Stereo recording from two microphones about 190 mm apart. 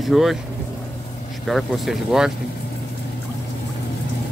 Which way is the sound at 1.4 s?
Centre (ahead or behind).